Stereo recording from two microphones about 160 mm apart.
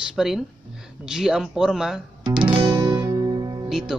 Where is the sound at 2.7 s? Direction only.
20° right (ahead or behind).